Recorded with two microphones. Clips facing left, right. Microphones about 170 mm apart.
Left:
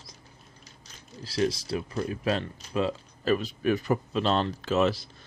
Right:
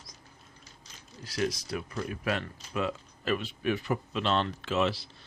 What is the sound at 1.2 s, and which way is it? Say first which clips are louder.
Speech: left 4 dB; 30° left (ahead or behind).